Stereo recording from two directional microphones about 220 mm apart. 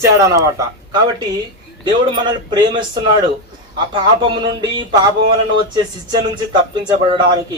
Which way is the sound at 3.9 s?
20° right (ahead or behind).